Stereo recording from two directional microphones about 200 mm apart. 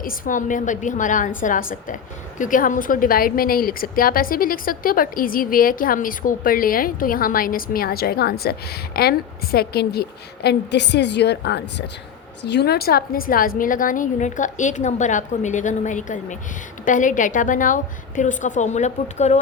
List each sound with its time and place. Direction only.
0.0 s a woman's voice: 45° left (ahead or behind)